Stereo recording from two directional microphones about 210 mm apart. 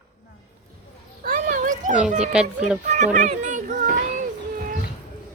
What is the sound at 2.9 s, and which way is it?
Speech, 35° right (ahead or behind).